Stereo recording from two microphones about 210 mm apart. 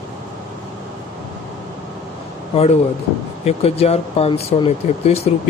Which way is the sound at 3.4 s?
30° left (ahead or behind).